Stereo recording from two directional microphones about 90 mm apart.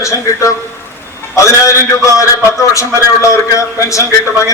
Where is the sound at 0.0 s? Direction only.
35° left (ahead or behind).